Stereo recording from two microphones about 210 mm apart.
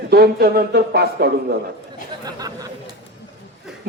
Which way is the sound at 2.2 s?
20° right (ahead or behind).